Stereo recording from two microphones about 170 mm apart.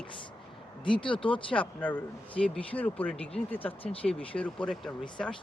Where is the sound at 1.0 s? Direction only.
30° left (ahead or behind).